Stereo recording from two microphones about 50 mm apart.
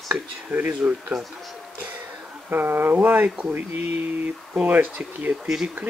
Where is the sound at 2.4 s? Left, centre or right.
Right.